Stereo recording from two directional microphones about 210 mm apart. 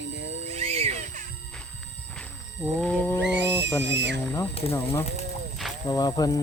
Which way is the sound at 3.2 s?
55° right (ahead or behind).